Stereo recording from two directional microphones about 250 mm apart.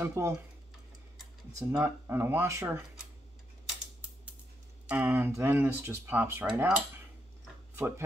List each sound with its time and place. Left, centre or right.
0.0 s speech: centre
1.7 s speech: centre
4.8 s speech: centre